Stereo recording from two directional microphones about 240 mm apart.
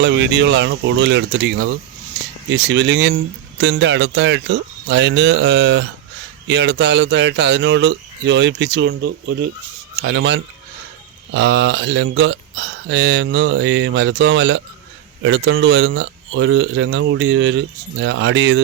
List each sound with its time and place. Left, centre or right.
0.0 s speech: right